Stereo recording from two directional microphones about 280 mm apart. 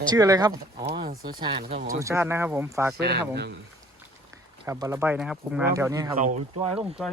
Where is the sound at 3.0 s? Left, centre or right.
Right.